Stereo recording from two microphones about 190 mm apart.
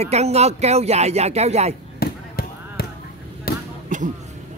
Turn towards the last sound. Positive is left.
turn(degrees=-40)  # may be behind; listen again after turning